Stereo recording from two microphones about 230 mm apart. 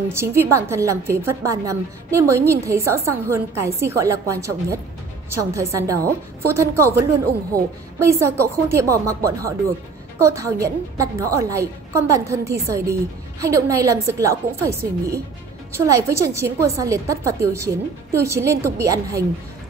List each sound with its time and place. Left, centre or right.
0.1 s a woman's voice: centre